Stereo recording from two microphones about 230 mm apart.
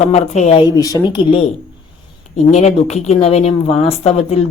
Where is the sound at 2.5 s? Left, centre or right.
Left.